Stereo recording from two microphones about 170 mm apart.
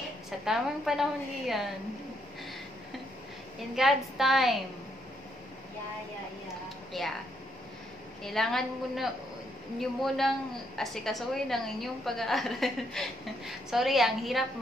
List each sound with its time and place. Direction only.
0.5 s a woman's voice: centre (ahead or behind)
3.7 s a woman's voice: centre (ahead or behind)
7.0 s a woman's voice: centre (ahead or behind)
8.2 s a woman's voice: centre (ahead or behind)